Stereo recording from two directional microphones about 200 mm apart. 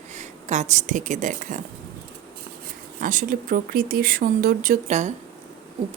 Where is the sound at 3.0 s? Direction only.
40° right (ahead or behind).